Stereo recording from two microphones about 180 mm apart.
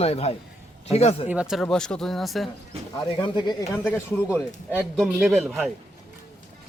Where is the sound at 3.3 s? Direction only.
25° left (ahead or behind).